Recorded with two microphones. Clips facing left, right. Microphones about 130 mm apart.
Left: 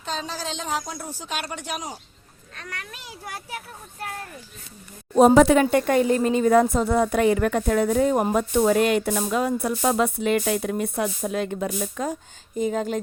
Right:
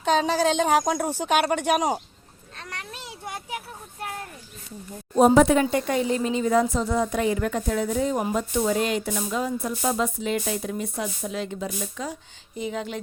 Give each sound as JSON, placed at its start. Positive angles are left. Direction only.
{"t": 0.0, "sound": "speech", "side_deg": -70}
{"t": 2.6, "sound": "a child's voice", "side_deg": -30}
{"t": 5.1, "sound": "speech", "side_deg": 90}